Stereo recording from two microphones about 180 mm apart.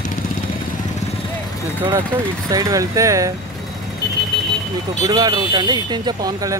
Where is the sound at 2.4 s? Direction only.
20° right (ahead or behind).